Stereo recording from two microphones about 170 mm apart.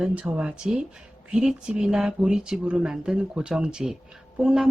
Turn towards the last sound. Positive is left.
turn(degrees=-5)  # may be behind; listen again after turning